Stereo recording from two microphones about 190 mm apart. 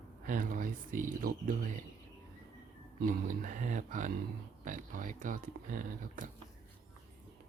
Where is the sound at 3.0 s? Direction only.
45° right (ahead or behind).